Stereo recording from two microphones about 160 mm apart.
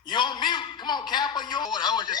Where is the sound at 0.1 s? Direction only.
30° left (ahead or behind).